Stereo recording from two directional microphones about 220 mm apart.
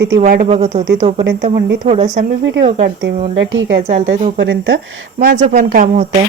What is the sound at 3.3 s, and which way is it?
Speech, 55° right (ahead or behind).